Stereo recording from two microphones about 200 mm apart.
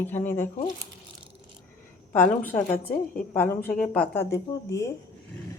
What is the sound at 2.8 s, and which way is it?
Speech, 45° left (ahead or behind).